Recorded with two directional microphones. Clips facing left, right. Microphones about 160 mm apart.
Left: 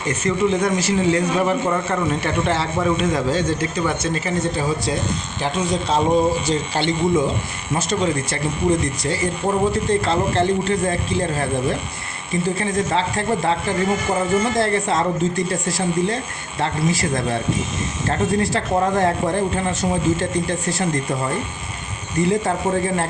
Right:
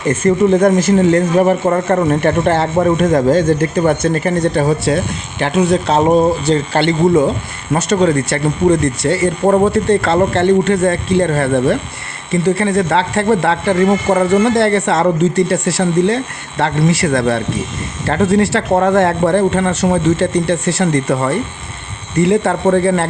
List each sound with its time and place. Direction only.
0.1 s speech: 50° right (ahead or behind); by 23.0 s 75° right (ahead or behind)